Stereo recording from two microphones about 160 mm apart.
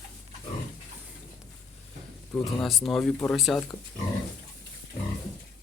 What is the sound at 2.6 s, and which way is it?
Speech, centre (ahead or behind).